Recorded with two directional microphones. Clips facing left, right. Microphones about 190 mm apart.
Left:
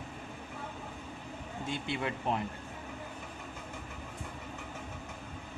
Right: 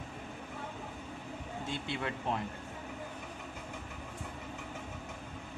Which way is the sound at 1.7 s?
15° left (ahead or behind).